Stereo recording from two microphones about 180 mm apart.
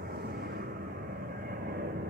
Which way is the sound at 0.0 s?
60° right (ahead or behind).